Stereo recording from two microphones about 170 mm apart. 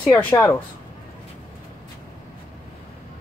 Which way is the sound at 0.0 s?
10° left (ahead or behind).